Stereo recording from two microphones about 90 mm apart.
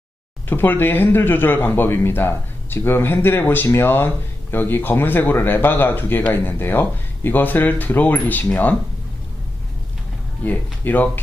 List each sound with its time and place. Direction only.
0.4 s speech: 25° left (ahead or behind)
10.4 s speech: 20° left (ahead or behind)